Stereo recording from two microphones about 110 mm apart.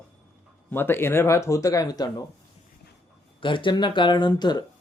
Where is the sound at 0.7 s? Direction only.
20° left (ahead or behind); by 2.2 s 35° left (ahead or behind).